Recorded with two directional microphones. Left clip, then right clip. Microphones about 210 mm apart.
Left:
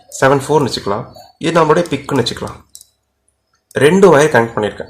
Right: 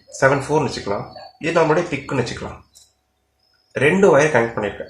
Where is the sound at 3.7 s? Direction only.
45° left (ahead or behind).